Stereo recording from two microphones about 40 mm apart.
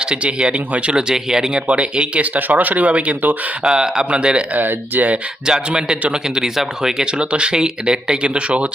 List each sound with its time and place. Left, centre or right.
0.0 s speech: right
0.9 s speech: centre
1.6 s speech: right
3.6 s speech: centre
4.5 s speech: right
5.5 s speech: centre